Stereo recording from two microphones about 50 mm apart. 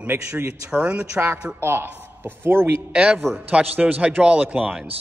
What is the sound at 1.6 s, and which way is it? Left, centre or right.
Speech, right.